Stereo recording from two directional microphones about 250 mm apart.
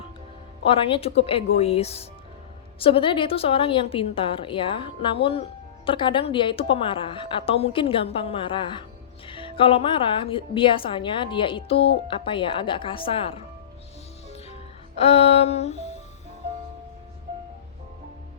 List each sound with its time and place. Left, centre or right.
0.6 s a woman's voice: left
14.3 s music: left